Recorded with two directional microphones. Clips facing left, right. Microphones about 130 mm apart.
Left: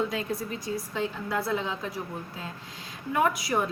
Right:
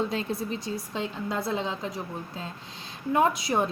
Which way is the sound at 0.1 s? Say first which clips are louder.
Right 1 dB; 25° right (ahead or behind).